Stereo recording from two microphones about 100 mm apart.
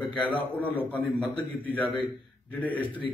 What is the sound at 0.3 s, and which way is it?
A man's voice, 15° left (ahead or behind).